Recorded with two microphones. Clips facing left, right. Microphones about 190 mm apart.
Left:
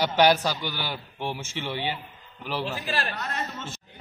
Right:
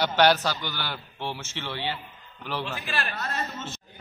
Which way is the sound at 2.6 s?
35° left (ahead or behind).